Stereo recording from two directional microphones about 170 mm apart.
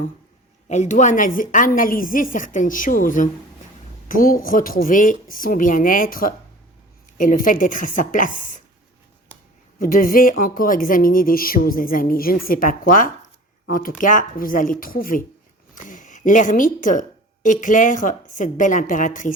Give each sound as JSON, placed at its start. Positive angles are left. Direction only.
{"t": 0.7, "sound": "a woman's voice", "side_deg": 45}
{"t": 9.7, "sound": "a woman's voice", "side_deg": 55}